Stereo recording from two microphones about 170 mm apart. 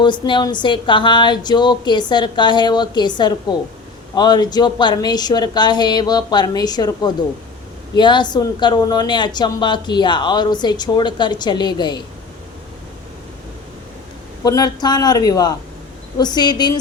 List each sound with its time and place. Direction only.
0.0 s a woman's voice: 25° left (ahead or behind)
14.4 s a woman's voice: 25° left (ahead or behind)